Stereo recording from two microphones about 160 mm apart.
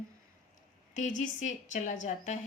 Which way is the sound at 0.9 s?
50° left (ahead or behind).